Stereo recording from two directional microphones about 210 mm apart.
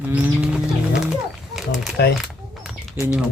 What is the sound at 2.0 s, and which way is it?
Speech, 55° left (ahead or behind).